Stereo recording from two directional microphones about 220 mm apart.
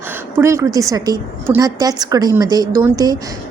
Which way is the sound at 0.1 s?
10° right (ahead or behind).